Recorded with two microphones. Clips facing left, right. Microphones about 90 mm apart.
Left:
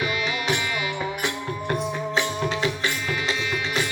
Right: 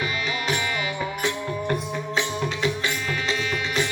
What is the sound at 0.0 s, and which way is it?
Music, 35° right (ahead or behind).